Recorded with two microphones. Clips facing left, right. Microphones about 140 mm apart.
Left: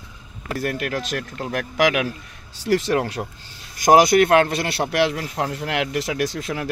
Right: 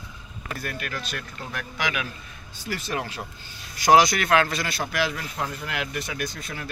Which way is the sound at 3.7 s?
45° left (ahead or behind).